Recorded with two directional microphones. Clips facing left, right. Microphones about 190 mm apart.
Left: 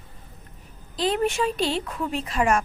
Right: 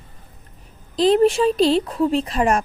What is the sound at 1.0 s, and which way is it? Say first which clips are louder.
A woman's voice: right 8 dB; 35° right (ahead or behind).